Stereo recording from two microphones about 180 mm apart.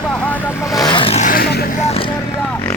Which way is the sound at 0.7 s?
25° left (ahead or behind).